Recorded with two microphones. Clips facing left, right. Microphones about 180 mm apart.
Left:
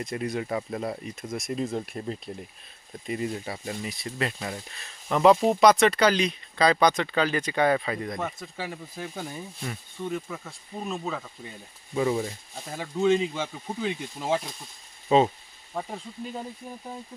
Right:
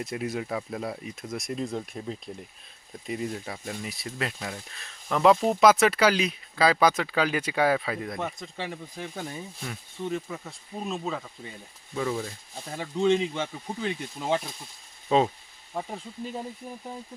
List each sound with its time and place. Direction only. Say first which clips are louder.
0.0 s speech: left 1 dB; 5° right (ahead or behind)
10.2 s speech: even; 15° right (ahead or behind)
10.8 s speech: even; centre (ahead or behind)
11.9 s speech: left 4 dB; 15° left (ahead or behind)
12.6 s speech: even; centre (ahead or behind)